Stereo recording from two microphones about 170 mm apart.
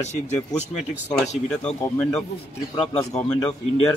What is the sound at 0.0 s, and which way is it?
Speech, 40° left (ahead or behind).